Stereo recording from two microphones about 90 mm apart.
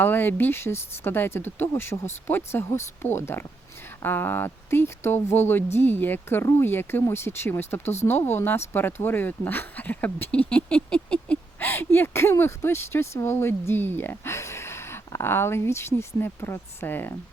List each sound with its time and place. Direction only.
0.0 s speech: 25° left (ahead or behind)